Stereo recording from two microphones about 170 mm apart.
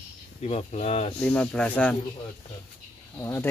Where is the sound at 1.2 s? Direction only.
5° left (ahead or behind).